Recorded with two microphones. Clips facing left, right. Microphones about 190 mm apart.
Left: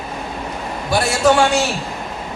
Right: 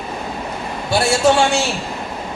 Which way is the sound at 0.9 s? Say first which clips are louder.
Even; 30° right (ahead or behind).